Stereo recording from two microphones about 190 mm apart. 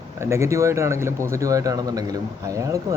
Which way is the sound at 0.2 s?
15° right (ahead or behind).